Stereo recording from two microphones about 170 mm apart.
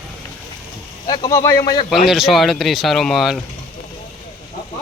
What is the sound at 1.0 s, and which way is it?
Speech, 25° left (ahead or behind).